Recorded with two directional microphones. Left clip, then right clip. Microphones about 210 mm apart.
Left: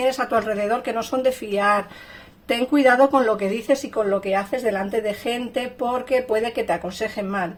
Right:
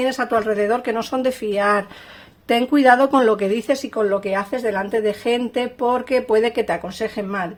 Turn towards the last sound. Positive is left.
turn(degrees=-40)  # may be behind; listen again after turning